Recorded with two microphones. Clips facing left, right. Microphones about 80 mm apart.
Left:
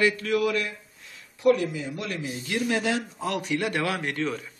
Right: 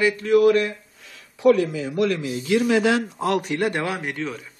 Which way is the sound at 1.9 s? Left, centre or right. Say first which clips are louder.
Right 10 dB; right.